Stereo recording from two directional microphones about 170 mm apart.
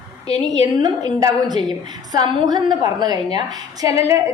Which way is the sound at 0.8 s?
20° right (ahead or behind).